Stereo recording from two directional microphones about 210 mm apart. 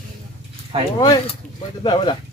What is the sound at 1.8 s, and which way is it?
Speech, 25° left (ahead or behind).